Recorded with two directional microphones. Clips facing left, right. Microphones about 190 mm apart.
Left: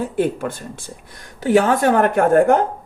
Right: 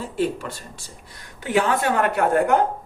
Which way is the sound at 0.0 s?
55° left (ahead or behind).